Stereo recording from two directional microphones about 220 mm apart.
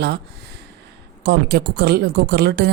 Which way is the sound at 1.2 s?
50° right (ahead or behind).